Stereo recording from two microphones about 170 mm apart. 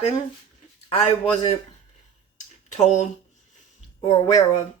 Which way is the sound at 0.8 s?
40° left (ahead or behind).